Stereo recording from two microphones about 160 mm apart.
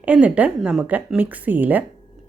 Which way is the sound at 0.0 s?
10° right (ahead or behind).